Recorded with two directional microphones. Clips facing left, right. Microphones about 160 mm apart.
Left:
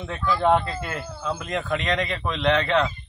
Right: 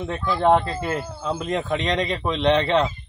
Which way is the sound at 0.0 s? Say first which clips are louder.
Right 2 dB; 20° right (ahead or behind).